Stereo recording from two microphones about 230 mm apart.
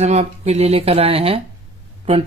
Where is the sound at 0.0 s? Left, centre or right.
Right.